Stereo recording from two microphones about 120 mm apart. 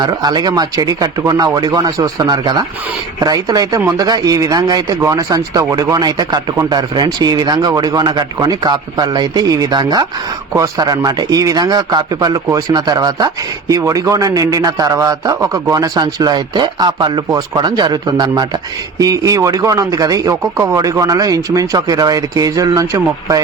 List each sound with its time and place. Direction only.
0.0 s a man's voice: 35° right (ahead or behind)